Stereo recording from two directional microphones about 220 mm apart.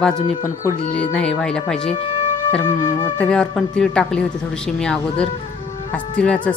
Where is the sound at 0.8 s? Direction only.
35° left (ahead or behind).